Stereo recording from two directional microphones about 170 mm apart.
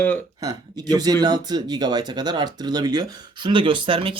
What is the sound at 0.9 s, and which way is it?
Speech, 20° right (ahead or behind).